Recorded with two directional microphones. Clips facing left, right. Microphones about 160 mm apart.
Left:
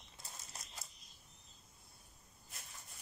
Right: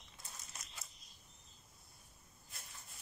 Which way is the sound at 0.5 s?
35° left (ahead or behind).